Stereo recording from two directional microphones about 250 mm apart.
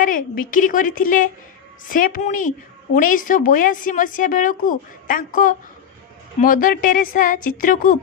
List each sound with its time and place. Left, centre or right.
0.0 s a woman's voice: left